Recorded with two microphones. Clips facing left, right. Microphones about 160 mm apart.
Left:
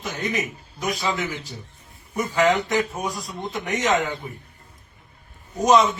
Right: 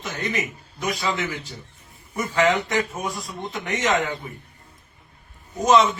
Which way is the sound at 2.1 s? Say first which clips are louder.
Left 1 dB; 10° left (ahead or behind).